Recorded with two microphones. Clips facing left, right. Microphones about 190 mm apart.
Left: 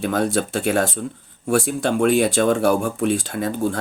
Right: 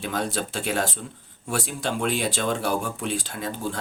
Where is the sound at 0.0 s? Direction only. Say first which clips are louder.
Left 7 dB; 50° left (ahead or behind).